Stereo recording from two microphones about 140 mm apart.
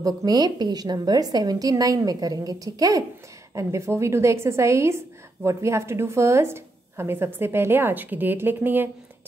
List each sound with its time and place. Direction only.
0.0 s a woman's voice: 30° right (ahead or behind)